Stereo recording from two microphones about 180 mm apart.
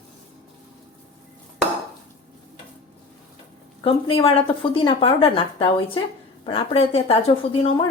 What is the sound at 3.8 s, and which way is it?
A woman's voice, 30° left (ahead or behind).